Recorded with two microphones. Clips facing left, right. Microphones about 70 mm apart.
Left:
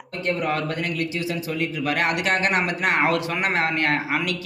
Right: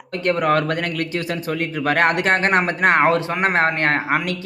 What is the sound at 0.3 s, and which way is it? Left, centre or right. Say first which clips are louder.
A man's voice: right 6 dB; right.